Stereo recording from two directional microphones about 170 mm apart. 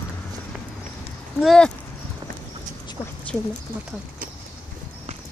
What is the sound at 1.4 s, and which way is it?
Speech, centre (ahead or behind).